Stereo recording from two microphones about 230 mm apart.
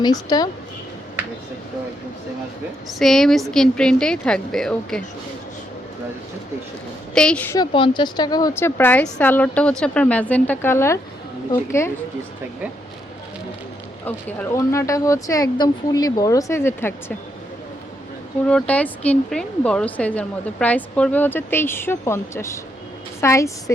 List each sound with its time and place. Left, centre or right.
0.0 s speech: centre
3.0 s a woman's voice: centre
7.1 s speech: centre
14.0 s speech: centre
18.4 s speech: centre